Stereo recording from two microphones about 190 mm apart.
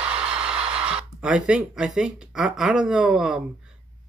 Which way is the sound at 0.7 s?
5° right (ahead or behind).